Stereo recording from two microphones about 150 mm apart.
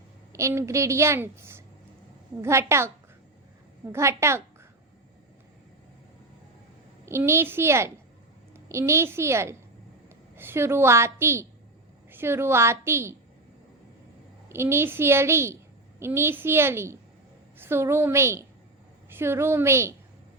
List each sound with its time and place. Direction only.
0.3 s a woman's voice: 20° right (ahead or behind)
3.9 s a woman's voice: 20° right (ahead or behind)
7.0 s a woman's voice: 15° right (ahead or behind)
14.5 s a woman's voice: 15° right (ahead or behind)